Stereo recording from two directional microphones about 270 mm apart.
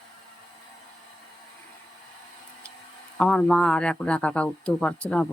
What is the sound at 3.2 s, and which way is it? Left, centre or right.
Speech, centre.